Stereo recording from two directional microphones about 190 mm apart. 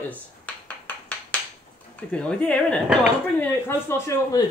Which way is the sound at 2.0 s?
5° left (ahead or behind).